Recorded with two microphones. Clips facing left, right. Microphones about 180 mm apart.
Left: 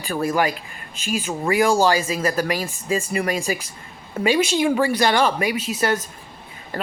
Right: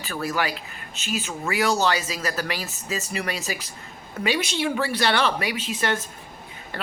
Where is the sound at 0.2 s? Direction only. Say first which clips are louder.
Left 5 dB; 40° left (ahead or behind).